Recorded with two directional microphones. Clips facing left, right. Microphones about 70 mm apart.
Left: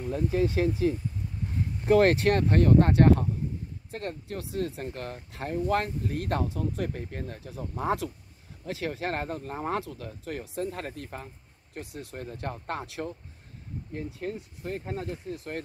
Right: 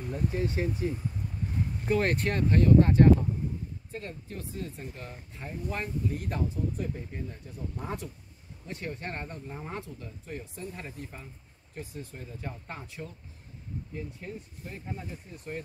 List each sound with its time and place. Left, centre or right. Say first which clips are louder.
0.3 s speech: left 8 dB; left
1.9 s speech: left 7 dB; left
11.8 s speech: left 3 dB; left
13.9 s speech: left 7 dB; left